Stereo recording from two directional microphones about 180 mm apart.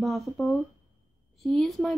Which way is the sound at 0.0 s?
Centre (ahead or behind).